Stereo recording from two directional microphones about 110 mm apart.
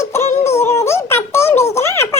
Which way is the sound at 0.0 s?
25° left (ahead or behind).